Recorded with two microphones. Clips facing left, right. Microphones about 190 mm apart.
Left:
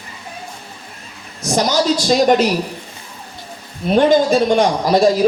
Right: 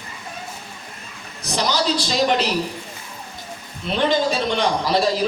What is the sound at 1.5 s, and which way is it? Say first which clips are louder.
A man's voice: left 6 dB; 45° left (ahead or behind).